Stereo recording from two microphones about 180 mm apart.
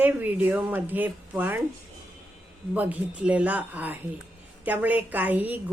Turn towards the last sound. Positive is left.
turn(degrees=-10)  # may be behind; listen again after turning